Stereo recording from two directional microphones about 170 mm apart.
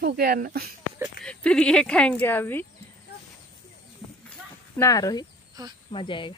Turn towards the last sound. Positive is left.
turn(degrees=30)  # may be behind; listen again after turning